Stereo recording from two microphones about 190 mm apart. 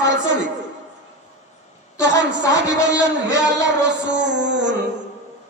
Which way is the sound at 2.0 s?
65° right (ahead or behind).